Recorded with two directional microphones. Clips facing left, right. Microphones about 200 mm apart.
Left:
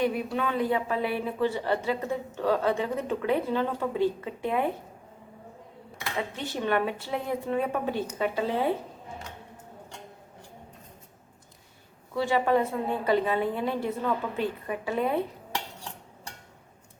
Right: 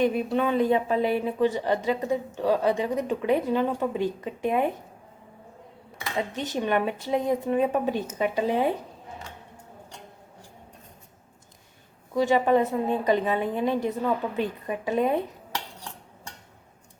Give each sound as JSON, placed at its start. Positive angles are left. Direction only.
{"t": 0.0, "sound": "speech", "side_deg": -20}
{"t": 6.5, "sound": "speech", "side_deg": -15}
{"t": 12.1, "sound": "speech", "side_deg": -20}